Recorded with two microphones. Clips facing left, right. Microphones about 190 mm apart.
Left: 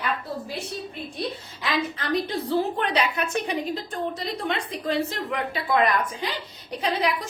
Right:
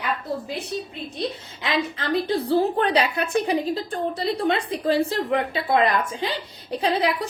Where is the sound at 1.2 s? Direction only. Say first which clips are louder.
Right 3 dB; 25° right (ahead or behind).